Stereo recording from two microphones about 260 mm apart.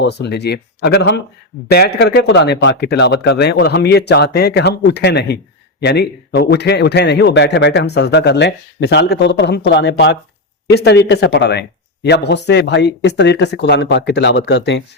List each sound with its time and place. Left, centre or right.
0.0 s a man's voice: left